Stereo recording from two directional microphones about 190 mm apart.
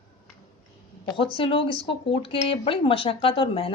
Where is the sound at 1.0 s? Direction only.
25° left (ahead or behind).